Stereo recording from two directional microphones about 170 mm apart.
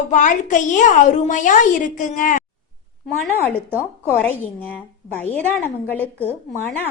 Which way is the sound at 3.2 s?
5° left (ahead or behind).